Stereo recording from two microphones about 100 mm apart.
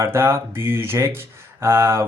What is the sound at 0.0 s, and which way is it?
Speech, 25° right (ahead or behind).